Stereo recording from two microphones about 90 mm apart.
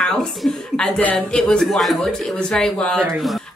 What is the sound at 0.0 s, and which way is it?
Speech, 5° left (ahead or behind).